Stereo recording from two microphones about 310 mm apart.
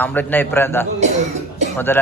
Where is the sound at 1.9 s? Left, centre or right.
Centre.